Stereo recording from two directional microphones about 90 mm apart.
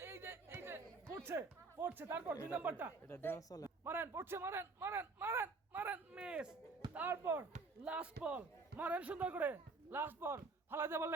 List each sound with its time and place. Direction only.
0.0 s chatter: 25° right (ahead or behind)
1.1 s speech: 30° right (ahead or behind)
2.5 s speech: 15° right (ahead or behind)
3.1 s speech: 25° left (ahead or behind)
3.8 s speech: 25° right (ahead or behind); by 6.6 s 10° right (ahead or behind)
6.9 s a man's voice: 25° right (ahead or behind)
7.9 s a man's voice: 15° right (ahead or behind)